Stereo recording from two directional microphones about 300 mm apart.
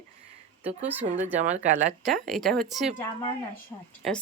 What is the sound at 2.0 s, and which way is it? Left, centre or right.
Speech, centre.